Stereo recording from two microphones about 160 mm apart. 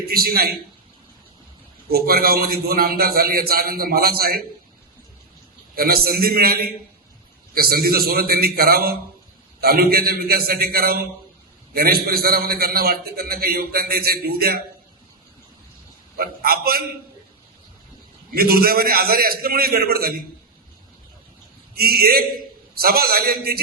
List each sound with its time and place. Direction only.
0.1 s a man's voice: 70° right (ahead or behind)
1.9 s a man's voice: 75° right (ahead or behind)
5.7 s a man's voice: 70° right (ahead or behind)
16.1 s a man's voice: 65° right (ahead or behind)
18.3 s a man's voice: 70° right (ahead or behind)
21.8 s a man's voice: 70° right (ahead or behind)